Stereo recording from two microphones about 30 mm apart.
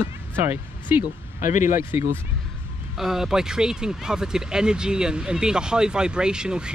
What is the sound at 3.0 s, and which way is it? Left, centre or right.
Speech, centre.